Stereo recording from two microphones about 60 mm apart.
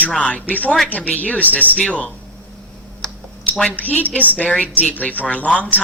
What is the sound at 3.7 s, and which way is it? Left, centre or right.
Speech, left.